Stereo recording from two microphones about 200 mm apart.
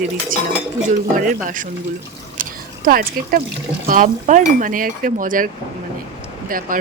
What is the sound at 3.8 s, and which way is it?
Cutlery, 40° right (ahead or behind).